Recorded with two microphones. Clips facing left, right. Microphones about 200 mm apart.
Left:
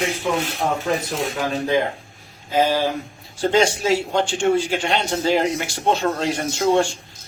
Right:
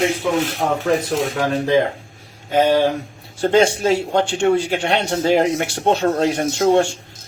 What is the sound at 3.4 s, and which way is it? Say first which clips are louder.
A man's voice: right 3 dB; 55° right (ahead or behind).